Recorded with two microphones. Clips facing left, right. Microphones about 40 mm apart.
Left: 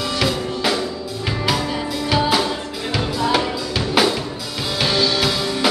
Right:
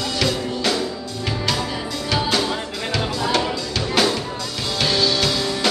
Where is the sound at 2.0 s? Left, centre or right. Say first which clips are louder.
Left 3 dB; centre.